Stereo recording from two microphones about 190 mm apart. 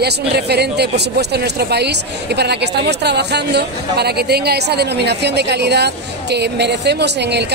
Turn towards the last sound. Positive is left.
turn(degrees=-60)  # may be behind; listen again after turning